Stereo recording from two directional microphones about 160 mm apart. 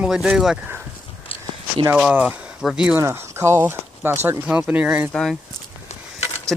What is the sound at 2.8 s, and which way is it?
Speech, 15° right (ahead or behind).